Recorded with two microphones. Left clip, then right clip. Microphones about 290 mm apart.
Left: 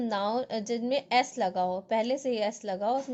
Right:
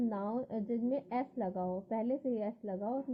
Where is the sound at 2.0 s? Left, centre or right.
Centre.